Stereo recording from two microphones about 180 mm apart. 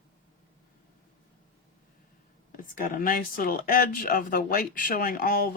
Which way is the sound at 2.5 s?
50° left (ahead or behind).